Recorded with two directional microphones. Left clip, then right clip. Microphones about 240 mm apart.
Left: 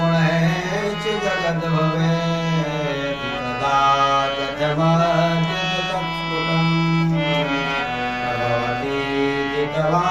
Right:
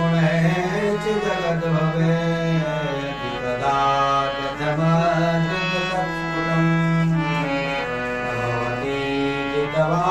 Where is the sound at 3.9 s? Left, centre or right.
Left.